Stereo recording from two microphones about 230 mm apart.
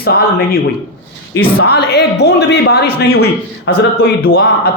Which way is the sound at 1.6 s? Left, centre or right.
Left.